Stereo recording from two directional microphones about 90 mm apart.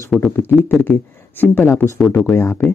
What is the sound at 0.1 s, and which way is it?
Speech, centre (ahead or behind).